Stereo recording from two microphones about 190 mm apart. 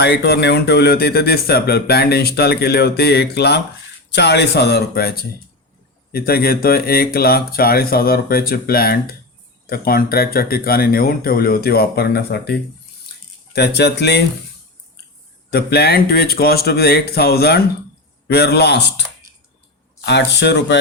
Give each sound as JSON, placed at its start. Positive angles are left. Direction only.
{"t": 0.0, "sound": "speech", "side_deg": 60}
{"t": 15.4, "sound": "speech", "side_deg": 55}
{"t": 20.1, "sound": "speech", "side_deg": 65}